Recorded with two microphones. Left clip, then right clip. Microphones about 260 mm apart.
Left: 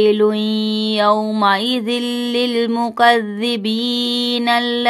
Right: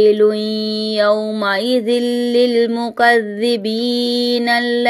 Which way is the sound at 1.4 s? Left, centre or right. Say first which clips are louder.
Right 1 dB; left.